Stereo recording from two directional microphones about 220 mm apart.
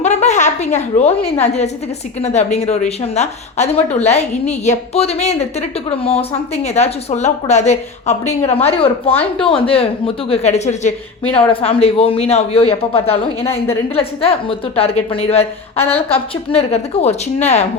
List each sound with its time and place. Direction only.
0.0 s a woman's voice: 30° left (ahead or behind)